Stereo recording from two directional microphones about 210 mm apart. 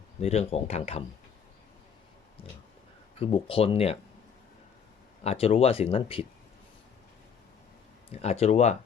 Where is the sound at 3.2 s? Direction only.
25° left (ahead or behind).